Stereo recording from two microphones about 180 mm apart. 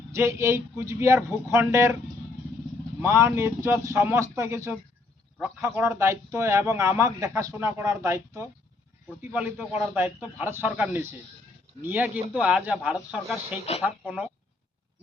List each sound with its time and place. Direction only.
0.1 s speech: 15° right (ahead or behind)
3.0 s speech: 15° right (ahead or behind)